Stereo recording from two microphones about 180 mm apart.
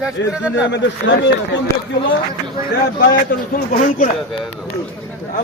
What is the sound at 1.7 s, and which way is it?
Speech, 15° left (ahead or behind).